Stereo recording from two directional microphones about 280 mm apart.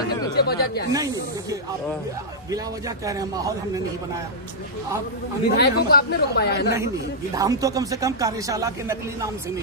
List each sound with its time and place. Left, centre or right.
0.3 s speech: left
0.9 s speech: centre
3.1 s speech: centre
5.5 s speech: left
7.3 s speech: centre